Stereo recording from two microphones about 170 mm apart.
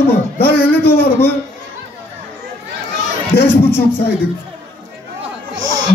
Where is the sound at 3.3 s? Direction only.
65° left (ahead or behind).